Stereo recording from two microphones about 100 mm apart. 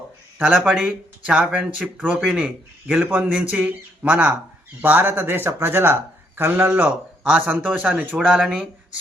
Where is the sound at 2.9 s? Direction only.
20° right (ahead or behind).